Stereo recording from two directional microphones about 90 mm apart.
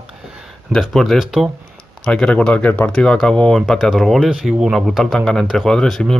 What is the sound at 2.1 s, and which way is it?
Speech, 10° left (ahead or behind).